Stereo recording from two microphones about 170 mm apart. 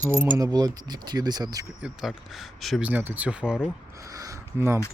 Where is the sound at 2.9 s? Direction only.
10° right (ahead or behind).